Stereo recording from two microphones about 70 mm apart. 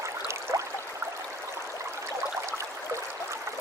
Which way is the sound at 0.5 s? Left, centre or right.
Right.